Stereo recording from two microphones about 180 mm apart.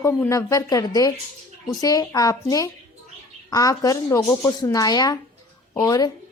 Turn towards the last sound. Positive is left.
turn(degrees=20)  # may be behind; listen again after turning